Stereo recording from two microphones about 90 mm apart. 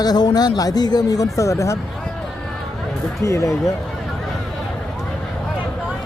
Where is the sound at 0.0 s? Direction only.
50° left (ahead or behind).